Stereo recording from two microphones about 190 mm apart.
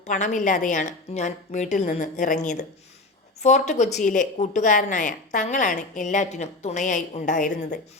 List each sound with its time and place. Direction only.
0.1 s a woman's voice: 40° left (ahead or behind)